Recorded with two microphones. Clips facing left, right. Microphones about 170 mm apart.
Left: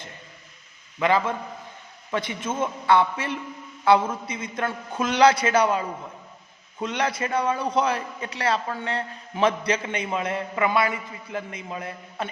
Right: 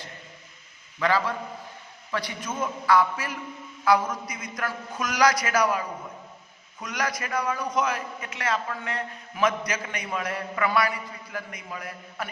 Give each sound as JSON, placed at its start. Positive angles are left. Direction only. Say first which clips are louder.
{"t": 0.9, "sound": "a man's voice", "louder": "left 3 dB", "side_deg": 20}